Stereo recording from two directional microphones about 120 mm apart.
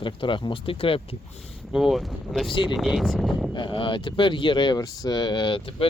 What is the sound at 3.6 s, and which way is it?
Speech, 45° left (ahead or behind).